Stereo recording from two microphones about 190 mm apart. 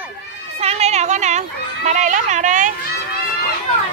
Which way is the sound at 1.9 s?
40° right (ahead or behind).